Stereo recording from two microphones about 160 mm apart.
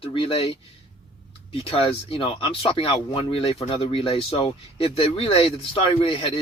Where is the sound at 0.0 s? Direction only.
35° left (ahead or behind).